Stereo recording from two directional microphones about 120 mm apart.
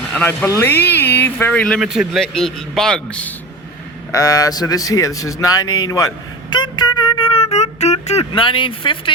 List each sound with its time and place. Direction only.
0.1 s speech: 15° left (ahead or behind)
1.8 s a man's voice: 5° right (ahead or behind)
4.1 s a man's voice: 30° left (ahead or behind)
6.5 s music: 40° left (ahead or behind); by 7.9 s 65° left (ahead or behind)
8.0 s speech: 60° left (ahead or behind)
8.3 s speech: 45° left (ahead or behind)